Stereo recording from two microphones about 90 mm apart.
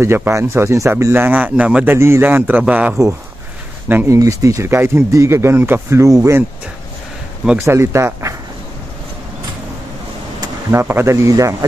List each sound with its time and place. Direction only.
0.0 s speech: 30° right (ahead or behind); by 1.9 s 15° right (ahead or behind)
1.9 s speech: 25° right (ahead or behind)
4.1 s speech: 35° right (ahead or behind)
7.6 s speech: 30° right (ahead or behind)
10.7 s speech: 25° right (ahead or behind)